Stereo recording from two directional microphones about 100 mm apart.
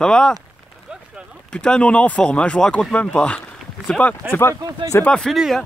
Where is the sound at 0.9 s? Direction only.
10° right (ahead or behind).